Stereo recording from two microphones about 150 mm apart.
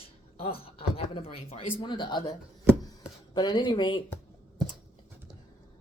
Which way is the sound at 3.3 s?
30° left (ahead or behind).